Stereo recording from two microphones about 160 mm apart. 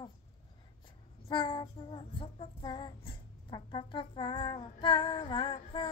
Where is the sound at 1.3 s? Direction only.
30° left (ahead or behind).